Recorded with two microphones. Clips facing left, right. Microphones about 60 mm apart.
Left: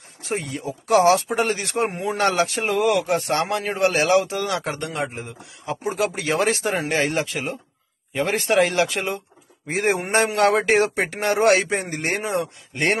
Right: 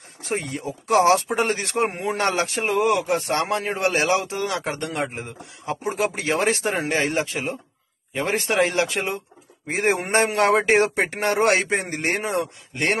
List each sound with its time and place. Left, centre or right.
0.3 s speech: right
2.1 s speech: right
4.8 s a man's voice: right